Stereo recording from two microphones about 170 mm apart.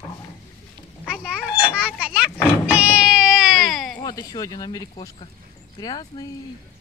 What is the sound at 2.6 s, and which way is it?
Music, 10° right (ahead or behind).